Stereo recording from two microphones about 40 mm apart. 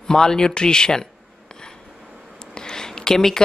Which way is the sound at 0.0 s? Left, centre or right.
Centre.